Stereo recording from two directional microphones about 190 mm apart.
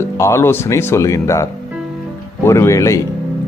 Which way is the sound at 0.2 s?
15° left (ahead or behind).